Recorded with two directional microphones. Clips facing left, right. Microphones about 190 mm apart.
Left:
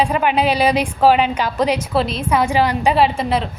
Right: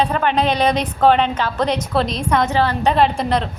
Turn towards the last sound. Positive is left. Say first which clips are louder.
# even
turn(degrees=5)  # may be behind; listen again after turning